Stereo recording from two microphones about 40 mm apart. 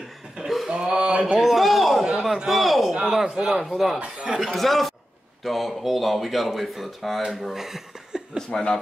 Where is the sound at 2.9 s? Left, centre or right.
Centre.